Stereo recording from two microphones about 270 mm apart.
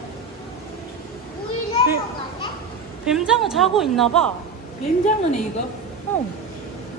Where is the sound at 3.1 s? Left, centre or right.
Centre.